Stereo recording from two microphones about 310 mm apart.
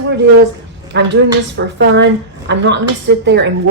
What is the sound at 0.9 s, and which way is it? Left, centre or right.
A woman's voice, right.